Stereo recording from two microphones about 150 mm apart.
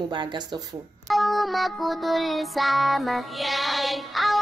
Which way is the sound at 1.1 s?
Centre (ahead or behind).